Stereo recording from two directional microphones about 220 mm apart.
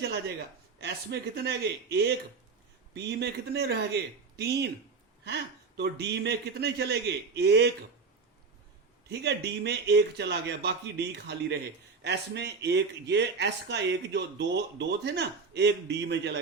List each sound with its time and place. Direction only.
0.0 s speech: 50° right (ahead or behind)
9.0 s speech: 50° right (ahead or behind)